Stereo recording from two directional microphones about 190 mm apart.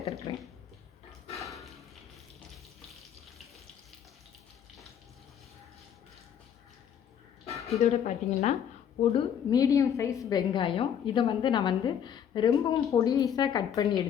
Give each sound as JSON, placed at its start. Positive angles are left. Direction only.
{"t": 0.3, "sound": "a woman's voice", "side_deg": 25}
{"t": 1.4, "sound": "a sound", "side_deg": 0}
{"t": 7.4, "sound": "speech", "side_deg": 35}
{"t": 9.1, "sound": "a woman's voice", "side_deg": 20}